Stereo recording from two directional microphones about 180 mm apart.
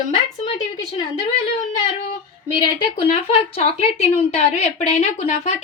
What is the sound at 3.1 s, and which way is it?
A woman's voice, 35° left (ahead or behind).